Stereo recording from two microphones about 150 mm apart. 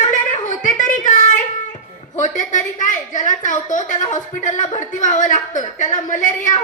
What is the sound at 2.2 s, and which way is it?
A woman's voice, 55° left (ahead or behind).